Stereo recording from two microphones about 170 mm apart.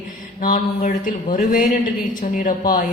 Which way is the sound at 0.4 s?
50° left (ahead or behind).